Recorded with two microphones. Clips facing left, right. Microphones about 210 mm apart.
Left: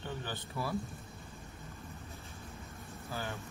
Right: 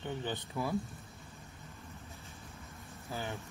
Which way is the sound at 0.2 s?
20° right (ahead or behind).